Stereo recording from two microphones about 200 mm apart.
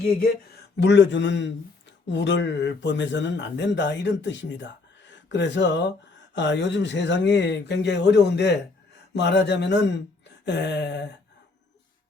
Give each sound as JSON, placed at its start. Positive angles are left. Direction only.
{"t": 0.0, "sound": "speech", "side_deg": 50}